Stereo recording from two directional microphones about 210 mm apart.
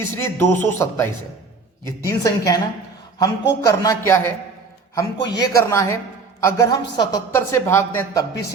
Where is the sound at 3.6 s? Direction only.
15° left (ahead or behind).